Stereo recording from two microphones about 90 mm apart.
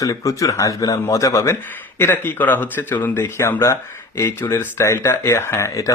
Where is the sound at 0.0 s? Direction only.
40° left (ahead or behind).